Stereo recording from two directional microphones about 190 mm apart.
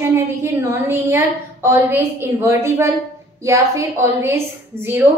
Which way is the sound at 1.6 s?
15° right (ahead or behind).